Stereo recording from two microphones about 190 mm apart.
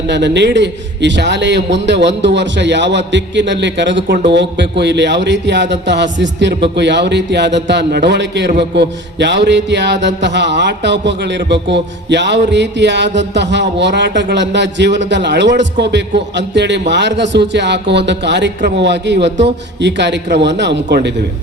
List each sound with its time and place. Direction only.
0.1 s a man's voice: 65° right (ahead or behind)